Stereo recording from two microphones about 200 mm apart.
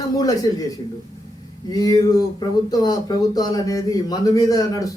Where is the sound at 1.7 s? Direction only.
20° left (ahead or behind).